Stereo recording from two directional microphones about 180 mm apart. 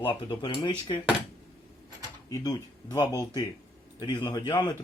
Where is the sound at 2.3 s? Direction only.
20° left (ahead or behind).